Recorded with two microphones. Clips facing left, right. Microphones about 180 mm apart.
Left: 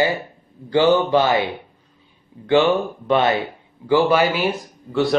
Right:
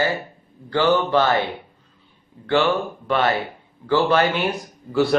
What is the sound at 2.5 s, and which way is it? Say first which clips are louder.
Speech: left 3 dB; 20° left (ahead or behind).